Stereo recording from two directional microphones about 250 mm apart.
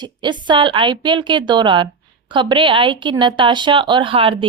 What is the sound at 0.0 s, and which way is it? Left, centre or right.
A woman's voice, centre.